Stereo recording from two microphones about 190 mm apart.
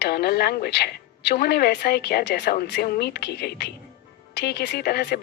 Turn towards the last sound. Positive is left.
turn(degrees=55)  # may be behind; listen again after turning